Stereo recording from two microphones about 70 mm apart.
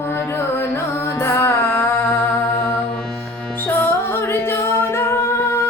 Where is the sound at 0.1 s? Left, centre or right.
Left.